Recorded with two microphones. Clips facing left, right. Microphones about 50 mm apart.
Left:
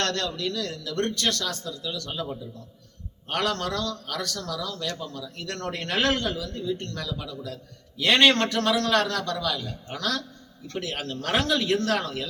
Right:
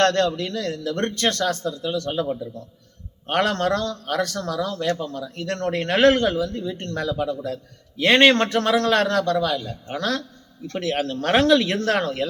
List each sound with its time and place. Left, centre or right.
0.0 s a man's voice: right
3.2 s a man's voice: right
5.5 s a man's voice: right
10.7 s a man's voice: right